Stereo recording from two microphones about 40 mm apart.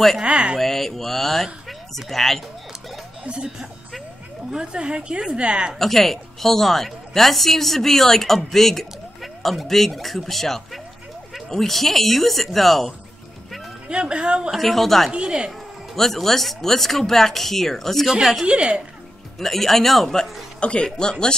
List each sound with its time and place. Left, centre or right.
0.2 s a woman's voice: right
0.6 s speech: centre
4.5 s a woman's voice: right
5.8 s a woman's voice: centre
13.8 s a woman's voice: right
14.5 s a woman's voice: centre
15.0 s a woman's voice: centre
15.9 s a woman's voice: centre
18.4 s a woman's voice: right
19.3 s a woman's voice: centre
20.6 s speech: left